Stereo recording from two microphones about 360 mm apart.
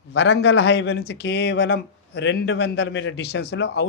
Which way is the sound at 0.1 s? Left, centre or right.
Left.